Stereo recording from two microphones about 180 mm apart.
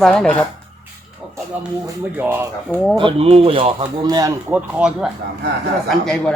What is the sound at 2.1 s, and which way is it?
Speech, 10° right (ahead or behind).